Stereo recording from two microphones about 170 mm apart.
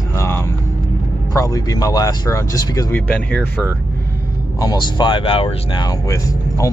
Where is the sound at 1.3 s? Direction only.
20° left (ahead or behind).